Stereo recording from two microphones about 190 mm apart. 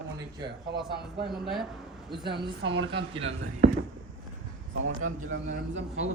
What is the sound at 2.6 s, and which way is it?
Speech, 70° right (ahead or behind).